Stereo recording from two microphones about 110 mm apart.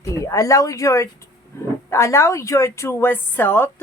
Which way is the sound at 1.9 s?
25° left (ahead or behind).